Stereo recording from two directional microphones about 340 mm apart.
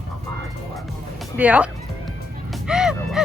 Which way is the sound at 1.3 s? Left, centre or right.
Centre.